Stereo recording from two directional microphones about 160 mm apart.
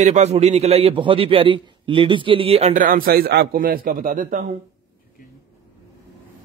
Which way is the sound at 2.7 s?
60° right (ahead or behind).